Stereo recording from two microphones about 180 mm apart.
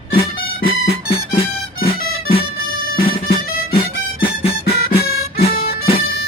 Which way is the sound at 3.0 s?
30° left (ahead or behind).